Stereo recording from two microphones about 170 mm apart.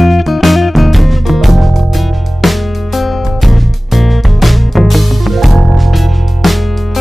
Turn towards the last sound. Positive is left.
turn(degrees=0)  # may be behind; listen again after turning